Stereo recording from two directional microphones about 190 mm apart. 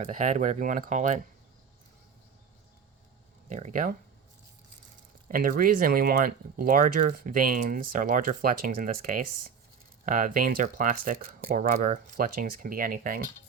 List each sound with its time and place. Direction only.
0.0 s speech: 40° right (ahead or behind)
3.5 s speech: 40° right (ahead or behind)
5.3 s speech: 50° right (ahead or behind)